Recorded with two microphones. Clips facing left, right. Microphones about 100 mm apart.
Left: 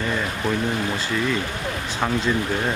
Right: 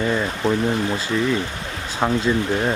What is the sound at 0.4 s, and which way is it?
Speech, 30° right (ahead or behind).